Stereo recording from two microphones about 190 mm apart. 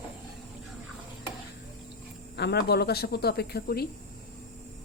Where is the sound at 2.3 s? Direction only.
60° left (ahead or behind).